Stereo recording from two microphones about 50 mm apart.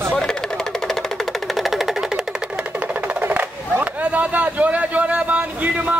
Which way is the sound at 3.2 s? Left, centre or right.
Right.